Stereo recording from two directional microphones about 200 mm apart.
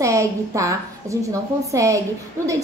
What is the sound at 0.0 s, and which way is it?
A woman's voice, 15° right (ahead or behind).